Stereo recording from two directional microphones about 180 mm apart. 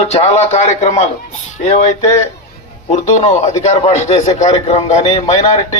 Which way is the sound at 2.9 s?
40° left (ahead or behind).